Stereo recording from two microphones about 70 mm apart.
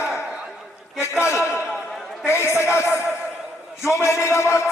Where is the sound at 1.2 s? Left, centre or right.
Left.